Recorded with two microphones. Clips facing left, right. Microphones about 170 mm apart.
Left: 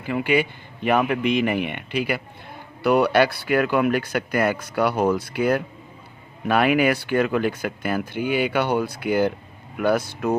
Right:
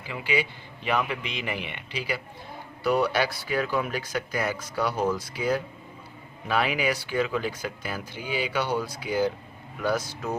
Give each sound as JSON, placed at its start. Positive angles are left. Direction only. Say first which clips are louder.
{"t": 0.0, "sound": "speech", "louder": "left 7 dB", "side_deg": 55}